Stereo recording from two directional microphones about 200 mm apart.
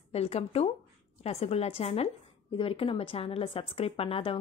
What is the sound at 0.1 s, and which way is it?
A woman's voice, 30° left (ahead or behind).